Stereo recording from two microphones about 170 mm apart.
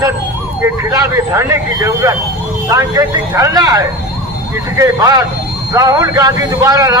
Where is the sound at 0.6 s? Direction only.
20° right (ahead or behind).